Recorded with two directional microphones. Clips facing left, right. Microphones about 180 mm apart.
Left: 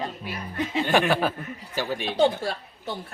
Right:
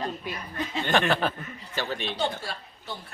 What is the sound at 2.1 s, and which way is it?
Speech, 50° left (ahead or behind).